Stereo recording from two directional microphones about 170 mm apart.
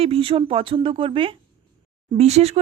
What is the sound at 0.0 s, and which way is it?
A woman's voice, 35° right (ahead or behind).